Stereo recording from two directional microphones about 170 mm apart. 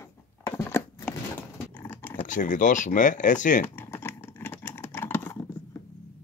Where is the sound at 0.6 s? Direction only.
15° left (ahead or behind).